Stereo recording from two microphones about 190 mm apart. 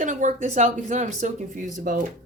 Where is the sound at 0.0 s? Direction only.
40° right (ahead or behind).